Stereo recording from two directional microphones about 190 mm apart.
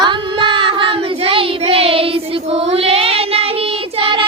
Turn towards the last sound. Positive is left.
turn(degrees=-30)  # may be behind; listen again after turning